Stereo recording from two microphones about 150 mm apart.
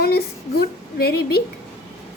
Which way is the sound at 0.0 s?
90° left.